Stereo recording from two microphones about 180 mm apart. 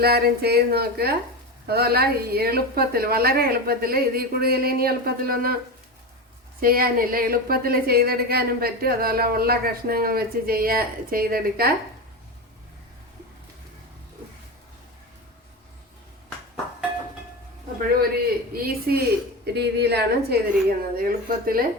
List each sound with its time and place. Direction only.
0.0 s a woman's voice: 60° right (ahead or behind)
6.6 s a woman's voice: 55° right (ahead or behind)
17.7 s a woman's voice: 55° right (ahead or behind)